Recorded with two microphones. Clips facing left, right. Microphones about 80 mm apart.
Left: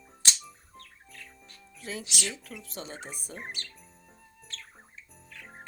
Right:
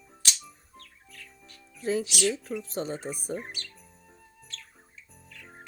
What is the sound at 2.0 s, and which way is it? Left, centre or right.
Speech, left.